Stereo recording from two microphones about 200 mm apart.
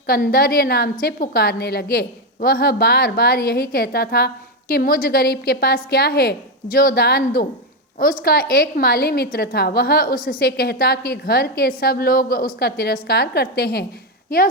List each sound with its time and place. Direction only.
0.1 s a woman's voice: 50° left (ahead or behind)